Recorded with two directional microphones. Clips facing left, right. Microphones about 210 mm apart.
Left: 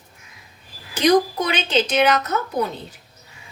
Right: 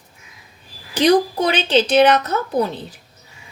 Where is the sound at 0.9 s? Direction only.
30° right (ahead or behind).